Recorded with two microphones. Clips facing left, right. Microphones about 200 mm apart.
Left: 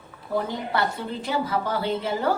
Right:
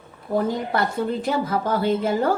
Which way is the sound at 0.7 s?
50° right (ahead or behind).